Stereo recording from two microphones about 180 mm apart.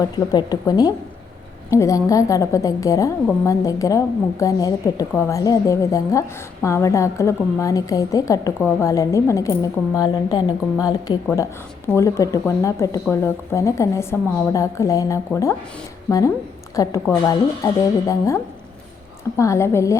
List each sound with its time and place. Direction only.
0.0 s a woman's voice: 20° left (ahead or behind)
19.4 s a woman's voice: 15° left (ahead or behind)